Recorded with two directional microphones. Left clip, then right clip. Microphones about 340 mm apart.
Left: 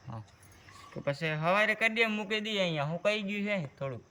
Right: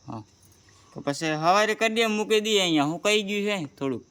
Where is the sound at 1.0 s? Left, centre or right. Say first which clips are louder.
Right 7 dB; right.